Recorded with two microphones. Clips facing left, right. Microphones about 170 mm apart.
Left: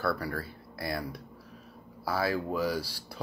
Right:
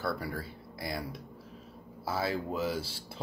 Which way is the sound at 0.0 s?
20° right (ahead or behind).